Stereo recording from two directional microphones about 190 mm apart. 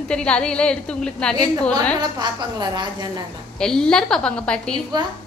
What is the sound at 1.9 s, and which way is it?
A woman's voice, 20° right (ahead or behind).